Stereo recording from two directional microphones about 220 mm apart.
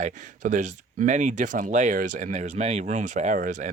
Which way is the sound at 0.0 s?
35° right (ahead or behind).